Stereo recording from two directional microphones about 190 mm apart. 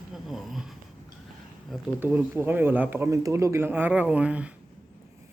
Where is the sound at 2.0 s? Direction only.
10° right (ahead or behind).